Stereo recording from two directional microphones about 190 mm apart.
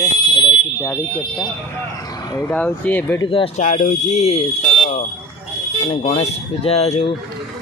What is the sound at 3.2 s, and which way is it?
Speech, 30° left (ahead or behind).